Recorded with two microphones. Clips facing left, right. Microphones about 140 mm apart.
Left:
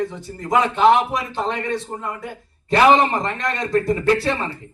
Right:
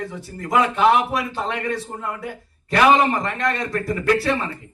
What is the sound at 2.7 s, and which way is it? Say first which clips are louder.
Speech: left 1 dB; 25° left (ahead or behind).